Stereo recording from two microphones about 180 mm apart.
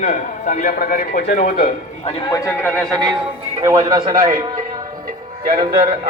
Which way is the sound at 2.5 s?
10° left (ahead or behind).